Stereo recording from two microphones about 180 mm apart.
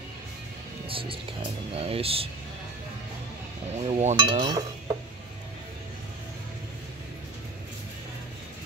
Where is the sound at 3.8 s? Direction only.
35° right (ahead or behind).